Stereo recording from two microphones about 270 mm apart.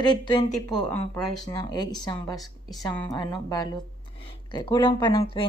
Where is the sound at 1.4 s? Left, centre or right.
Centre.